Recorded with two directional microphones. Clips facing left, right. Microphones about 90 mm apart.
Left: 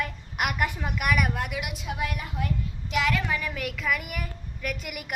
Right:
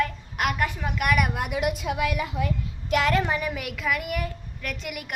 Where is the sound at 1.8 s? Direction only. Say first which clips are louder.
Right 6 dB; 90° right.